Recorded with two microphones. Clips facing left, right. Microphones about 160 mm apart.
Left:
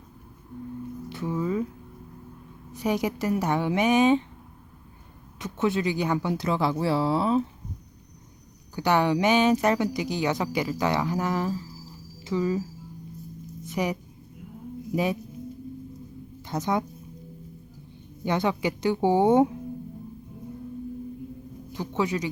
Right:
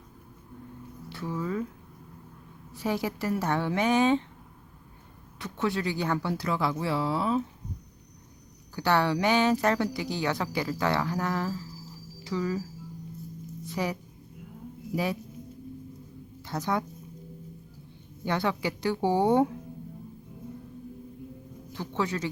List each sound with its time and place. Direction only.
1.1 s music: 20° left (ahead or behind)
2.7 s speech: 15° left (ahead or behind)
5.4 s speech: 20° left (ahead or behind)
8.7 s speech: 15° left (ahead or behind)
13.7 s speech: 20° left (ahead or behind)
16.5 s speech: 20° left (ahead or behind)
18.3 s speech: 20° left (ahead or behind)
21.7 s a man's voice: 15° left (ahead or behind)